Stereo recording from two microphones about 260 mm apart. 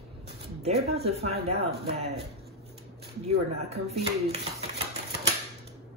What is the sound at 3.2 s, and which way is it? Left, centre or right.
Speech, right.